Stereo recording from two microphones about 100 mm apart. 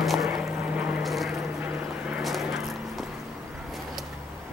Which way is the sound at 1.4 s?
20° right (ahead or behind).